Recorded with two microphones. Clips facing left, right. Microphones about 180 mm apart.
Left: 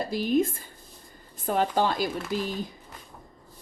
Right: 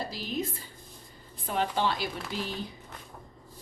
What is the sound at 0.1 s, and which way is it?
Speech, 50° left (ahead or behind).